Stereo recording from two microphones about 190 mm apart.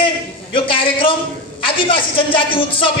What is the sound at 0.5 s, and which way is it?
A man's voice, 25° left (ahead or behind).